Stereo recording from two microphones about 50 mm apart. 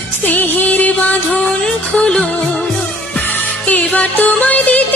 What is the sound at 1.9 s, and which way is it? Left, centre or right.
Music, centre.